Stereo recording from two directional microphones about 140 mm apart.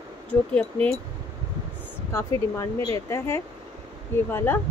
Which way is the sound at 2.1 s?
20° left (ahead or behind).